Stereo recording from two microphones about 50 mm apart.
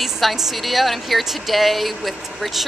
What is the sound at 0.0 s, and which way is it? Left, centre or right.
Speech, centre.